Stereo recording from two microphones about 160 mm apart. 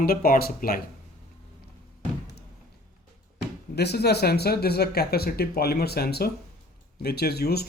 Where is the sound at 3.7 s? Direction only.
90° left.